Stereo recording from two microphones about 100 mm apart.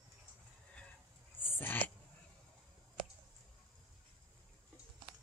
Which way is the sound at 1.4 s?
20° left (ahead or behind).